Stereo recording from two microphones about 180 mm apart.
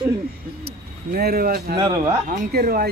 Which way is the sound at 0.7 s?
60° right (ahead or behind).